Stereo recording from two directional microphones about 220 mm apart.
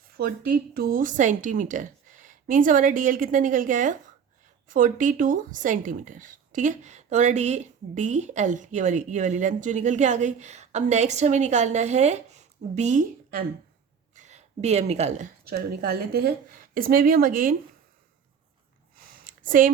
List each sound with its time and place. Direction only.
0.2 s a woman's voice: 45° right (ahead or behind)
15.4 s a woman's voice: 45° right (ahead or behind)
19.0 s a sound: 40° right (ahead or behind)